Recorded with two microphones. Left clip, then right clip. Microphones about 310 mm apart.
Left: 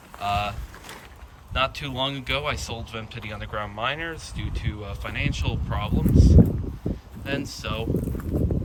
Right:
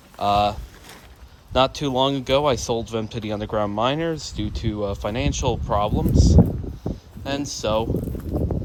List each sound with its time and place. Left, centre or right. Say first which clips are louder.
0.2 s speech: right 7 dB; centre
1.5 s speech: right 6 dB; centre
8.2 s a sound: right 1 dB; centre